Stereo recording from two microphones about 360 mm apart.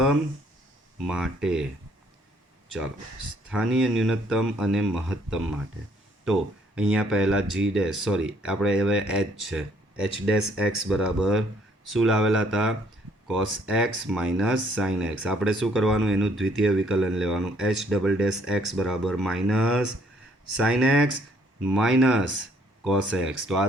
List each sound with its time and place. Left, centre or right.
1.0 s speech: centre
3.5 s speech: centre